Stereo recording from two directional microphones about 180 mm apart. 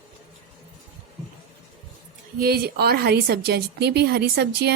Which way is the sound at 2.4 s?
60° right (ahead or behind).